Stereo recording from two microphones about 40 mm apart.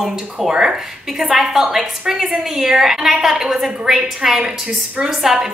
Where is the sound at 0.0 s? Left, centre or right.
Centre.